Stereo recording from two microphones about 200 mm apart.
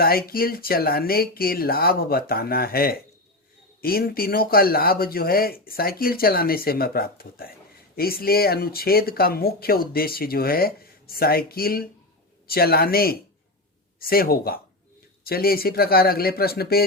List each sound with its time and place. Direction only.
0.0 s speech: 50° left (ahead or behind)